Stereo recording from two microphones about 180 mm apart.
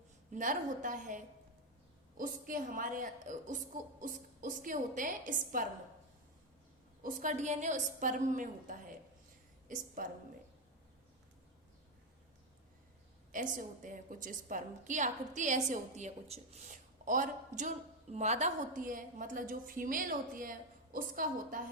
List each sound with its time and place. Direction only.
0.3 s a woman's voice: 45° right (ahead or behind)
7.0 s a woman's voice: 45° right (ahead or behind)
13.3 s a woman's voice: 45° right (ahead or behind)